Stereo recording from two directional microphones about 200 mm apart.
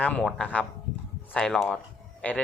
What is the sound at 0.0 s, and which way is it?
Speech, 5° left (ahead or behind).